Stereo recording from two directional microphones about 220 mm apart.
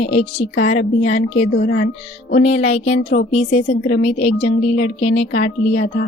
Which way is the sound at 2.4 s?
30° left (ahead or behind).